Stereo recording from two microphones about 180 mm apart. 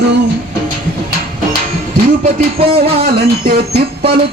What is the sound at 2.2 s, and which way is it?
Speech, 35° right (ahead or behind).